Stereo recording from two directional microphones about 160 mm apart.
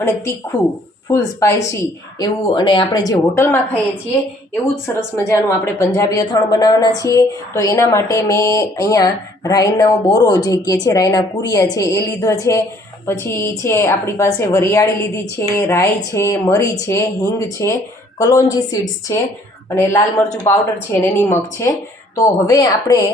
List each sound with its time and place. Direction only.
1.0 s speech: 20° left (ahead or behind)
4.7 s a woman's voice: 15° left (ahead or behind)